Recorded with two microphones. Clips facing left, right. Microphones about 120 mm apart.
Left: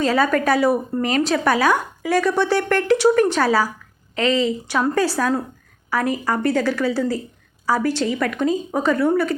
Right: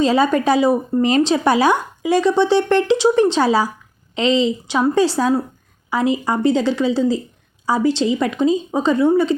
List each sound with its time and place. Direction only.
0.0 s a woman's voice: 20° right (ahead or behind)